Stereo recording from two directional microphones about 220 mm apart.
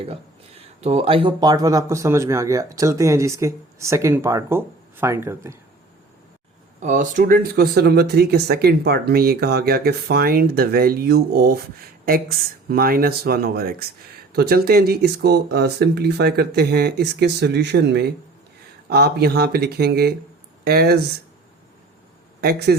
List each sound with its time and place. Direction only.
0.8 s speech: 25° right (ahead or behind); by 5.5 s 10° right (ahead or behind)
6.7 s speech: 35° right (ahead or behind)
22.4 s a man's voice: 45° right (ahead or behind)